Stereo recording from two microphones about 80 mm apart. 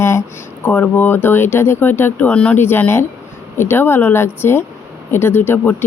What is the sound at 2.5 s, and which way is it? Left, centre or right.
Speech, left.